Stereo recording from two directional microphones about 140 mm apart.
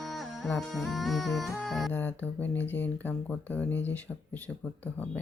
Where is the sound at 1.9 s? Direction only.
10° left (ahead or behind).